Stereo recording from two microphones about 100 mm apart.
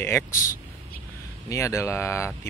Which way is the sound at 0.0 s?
30° left (ahead or behind).